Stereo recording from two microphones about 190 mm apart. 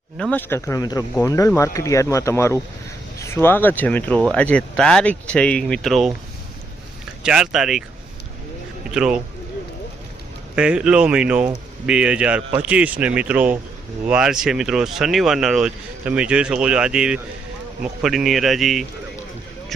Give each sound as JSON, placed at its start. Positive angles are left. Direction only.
{"t": 0.2, "sound": "speech", "side_deg": 10}
{"t": 7.2, "sound": "speech", "side_deg": -5}
{"t": 8.9, "sound": "speech", "side_deg": -5}
{"t": 10.5, "sound": "speech", "side_deg": -5}